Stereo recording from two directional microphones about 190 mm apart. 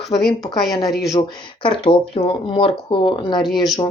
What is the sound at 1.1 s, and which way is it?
Speech, 25° left (ahead or behind).